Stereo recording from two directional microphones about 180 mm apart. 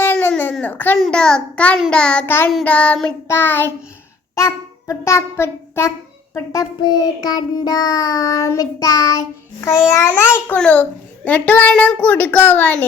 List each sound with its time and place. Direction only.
0.0 s baby cry: 10° left (ahead or behind)
0.9 s a child's voice: centre (ahead or behind)
4.4 s child singing: 15° left (ahead or behind)
10.0 s a woman's voice: 15° left (ahead or behind)